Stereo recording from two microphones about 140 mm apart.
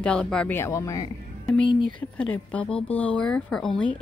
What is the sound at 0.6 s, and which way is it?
Speech, 20° left (ahead or behind).